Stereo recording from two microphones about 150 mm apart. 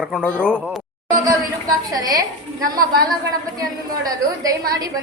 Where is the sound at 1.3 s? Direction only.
25° right (ahead or behind).